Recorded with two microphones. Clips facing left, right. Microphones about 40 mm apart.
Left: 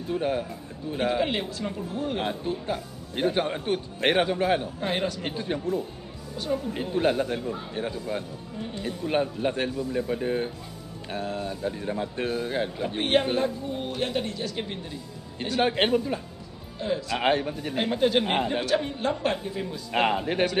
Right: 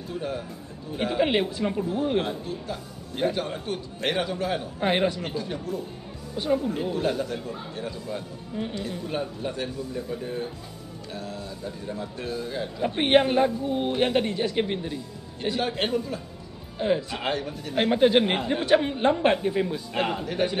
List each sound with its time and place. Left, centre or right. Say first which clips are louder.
0.1 s a man's voice: left 5 dB; left
0.9 s speech: left 1 dB; centre
1.2 s speech: right 4 dB; centre
2.2 s a man's voice: left 3 dB; left
4.7 s a man's voice: right 4 dB; right
5.2 s a man's voice: left 2 dB; left
6.3 s a man's voice: right 4 dB; centre
6.7 s a man's voice: left 1 dB; left
12.9 s a man's voice: right 4 dB; right
15.6 s a man's voice: left 6 dB; left
16.7 s a man's voice: right 4 dB; right
17.2 s a man's voice: left 4 dB; left
17.7 s a man's voice: right 4 dB; right
19.9 s a man's voice: left 3 dB; left